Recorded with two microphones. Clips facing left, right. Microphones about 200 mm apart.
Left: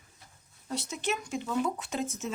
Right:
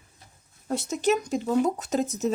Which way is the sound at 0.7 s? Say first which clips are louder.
Right 9 dB; 45° right (ahead or behind).